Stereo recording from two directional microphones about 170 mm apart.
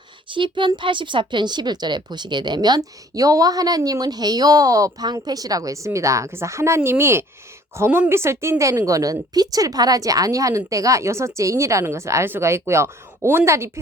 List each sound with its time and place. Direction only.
0.3 s a woman's voice: 30° right (ahead or behind)